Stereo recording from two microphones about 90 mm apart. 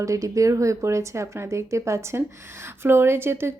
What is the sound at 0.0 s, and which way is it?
A woman's voice, 35° right (ahead or behind).